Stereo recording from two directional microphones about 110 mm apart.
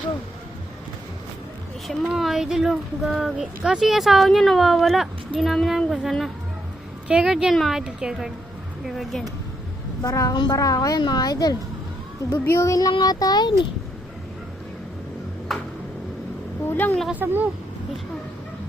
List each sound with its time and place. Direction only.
2.0 s speech: 5° right (ahead or behind)
10.0 s speech: 30° left (ahead or behind)
12.3 s a woman's voice: 25° left (ahead or behind)
15.5 s a sound: centre (ahead or behind)
16.6 s a woman's voice: 15° left (ahead or behind)
17.1 s speech: 15° right (ahead or behind)